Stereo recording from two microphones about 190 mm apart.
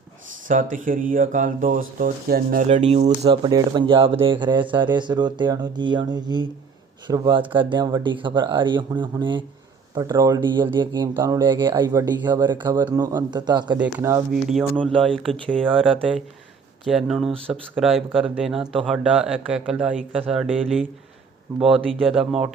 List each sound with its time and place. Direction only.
0.4 s speech: 45° right (ahead or behind)
2.6 s speech: 35° right (ahead or behind)
14.4 s speech: centre (ahead or behind)
21.8 s speech: centre (ahead or behind)